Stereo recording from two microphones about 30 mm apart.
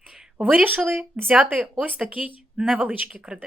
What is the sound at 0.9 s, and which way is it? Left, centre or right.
Speech, right.